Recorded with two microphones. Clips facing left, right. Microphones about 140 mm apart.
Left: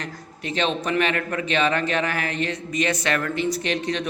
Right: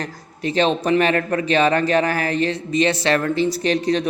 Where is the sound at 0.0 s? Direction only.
35° right (ahead or behind).